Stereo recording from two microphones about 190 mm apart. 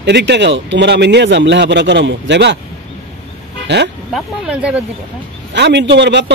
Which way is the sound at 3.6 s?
65° right (ahead or behind).